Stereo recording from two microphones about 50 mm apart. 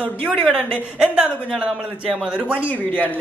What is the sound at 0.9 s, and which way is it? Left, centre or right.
A woman's voice, centre.